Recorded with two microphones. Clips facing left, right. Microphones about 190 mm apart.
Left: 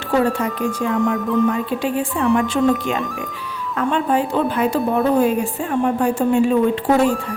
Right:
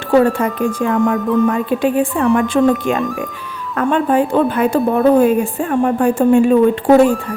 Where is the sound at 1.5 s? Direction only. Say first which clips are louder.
Right 4 dB; 55° right (ahead or behind).